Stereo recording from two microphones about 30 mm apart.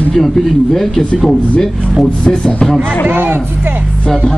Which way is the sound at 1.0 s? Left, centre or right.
Left.